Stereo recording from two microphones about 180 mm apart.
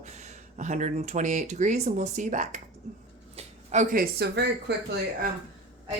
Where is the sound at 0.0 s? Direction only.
40° right (ahead or behind); by 4.9 s 65° right (ahead or behind).